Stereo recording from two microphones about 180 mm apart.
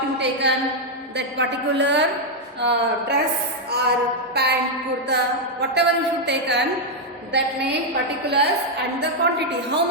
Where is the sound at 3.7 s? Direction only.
65° right (ahead or behind).